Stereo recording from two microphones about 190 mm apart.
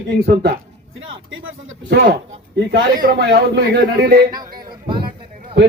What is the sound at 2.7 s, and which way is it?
A man's voice, 55° right (ahead or behind).